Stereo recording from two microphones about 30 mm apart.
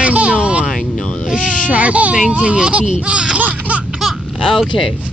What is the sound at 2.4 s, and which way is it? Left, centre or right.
Speech, right.